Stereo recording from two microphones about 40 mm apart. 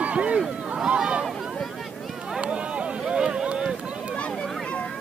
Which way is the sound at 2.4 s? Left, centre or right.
Right.